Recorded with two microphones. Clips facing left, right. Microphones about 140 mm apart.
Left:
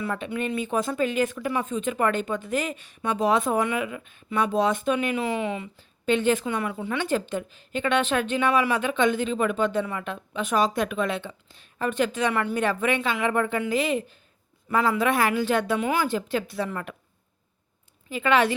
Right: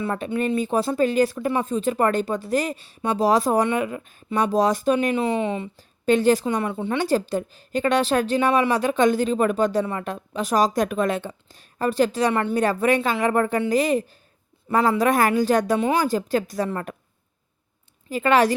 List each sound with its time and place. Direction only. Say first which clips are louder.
0.3 s a woman's voice: right 5 dB; 35° right (ahead or behind)
6.1 s a woman's voice: right 4 dB; 40° right (ahead or behind)
12.5 s a woman's voice: right 4 dB; 40° right (ahead or behind)
18.1 s a woman's voice: right 3 dB; 40° right (ahead or behind)